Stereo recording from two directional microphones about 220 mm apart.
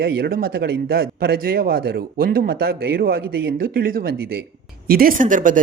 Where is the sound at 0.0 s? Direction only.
45° right (ahead or behind).